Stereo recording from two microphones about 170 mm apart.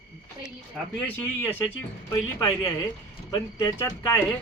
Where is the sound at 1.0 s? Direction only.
10° left (ahead or behind).